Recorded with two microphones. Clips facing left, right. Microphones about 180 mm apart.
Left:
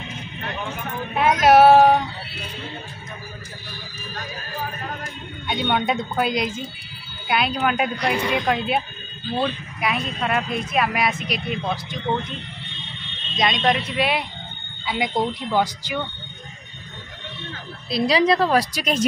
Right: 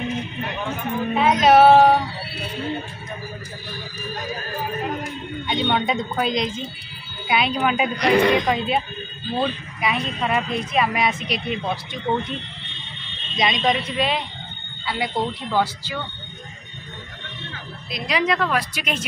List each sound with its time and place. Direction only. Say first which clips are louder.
1.1 s speech: even; 5° left (ahead or behind)
5.5 s speech: even; 5° left (ahead or behind)
8.0 s speech: right 6 dB; 70° right (ahead or behind)
8.5 s speech: even; 5° left (ahead or behind)
13.4 s speech: even; centre (ahead or behind); by 16.0 s 15° left (ahead or behind)
17.8 s a woman's voice: left 5 dB; 35° left (ahead or behind)